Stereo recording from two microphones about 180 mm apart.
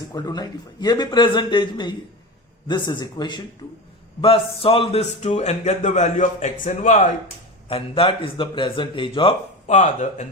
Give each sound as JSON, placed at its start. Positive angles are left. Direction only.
{"t": 0.1, "sound": "a man's voice", "side_deg": 20}
{"t": 9.6, "sound": "a man's voice", "side_deg": 40}